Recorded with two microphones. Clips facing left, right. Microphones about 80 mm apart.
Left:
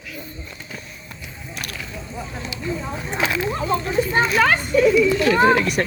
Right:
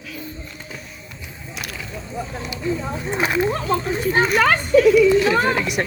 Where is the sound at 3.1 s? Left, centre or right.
Right.